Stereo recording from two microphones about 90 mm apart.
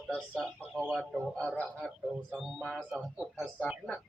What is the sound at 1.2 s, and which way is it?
Music, 5° left (ahead or behind).